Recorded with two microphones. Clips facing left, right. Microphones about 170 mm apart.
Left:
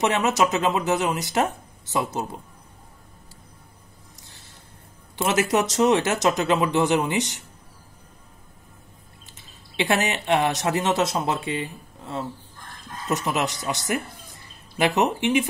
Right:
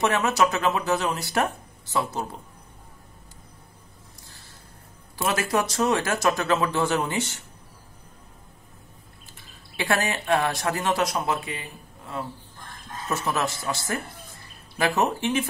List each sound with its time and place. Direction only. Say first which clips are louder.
0.0 s speech: left 1 dB; 20° left (ahead or behind)
4.2 s a sound: even; 20° left (ahead or behind)
5.1 s speech: left 3 dB; 20° left (ahead or behind)
9.8 s speech: left 2 dB; 20° left (ahead or behind)
15.0 s speech: left 3 dB; 20° left (ahead or behind)